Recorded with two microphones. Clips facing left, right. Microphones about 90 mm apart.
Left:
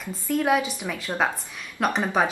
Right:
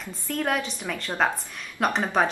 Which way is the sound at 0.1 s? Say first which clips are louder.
Left 5 dB; 5° left (ahead or behind).